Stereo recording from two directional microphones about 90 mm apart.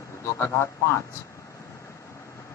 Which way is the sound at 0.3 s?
30° left (ahead or behind).